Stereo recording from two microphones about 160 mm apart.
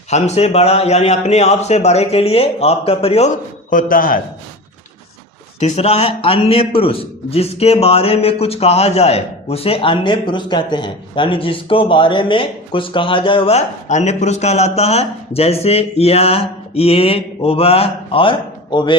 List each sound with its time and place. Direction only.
0.1 s a man's voice: 40° left (ahead or behind); by 4.2 s 60° left (ahead or behind)
5.5 s a man's voice: 45° left (ahead or behind); by 18.9 s 30° left (ahead or behind)